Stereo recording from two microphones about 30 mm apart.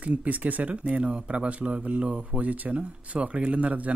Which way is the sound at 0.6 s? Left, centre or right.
Right.